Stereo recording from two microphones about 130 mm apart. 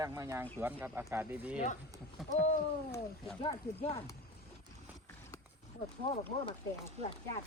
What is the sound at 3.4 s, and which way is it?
Speech, 50° left (ahead or behind).